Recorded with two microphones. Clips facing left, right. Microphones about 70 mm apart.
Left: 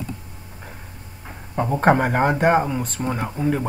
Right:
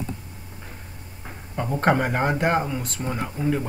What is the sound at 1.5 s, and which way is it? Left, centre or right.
Speech, left.